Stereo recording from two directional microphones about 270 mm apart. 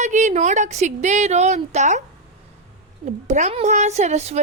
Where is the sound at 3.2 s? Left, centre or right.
Right.